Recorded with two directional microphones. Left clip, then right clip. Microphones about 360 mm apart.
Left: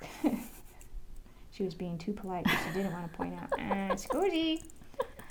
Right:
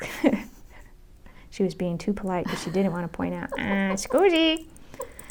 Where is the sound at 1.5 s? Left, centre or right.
Right.